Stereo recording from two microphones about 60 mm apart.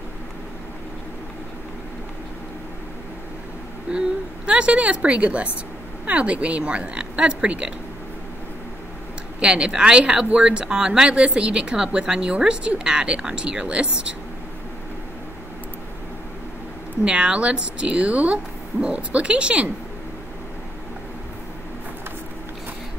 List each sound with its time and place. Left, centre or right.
3.9 s speech: centre
9.4 s speech: centre
17.0 s speech: centre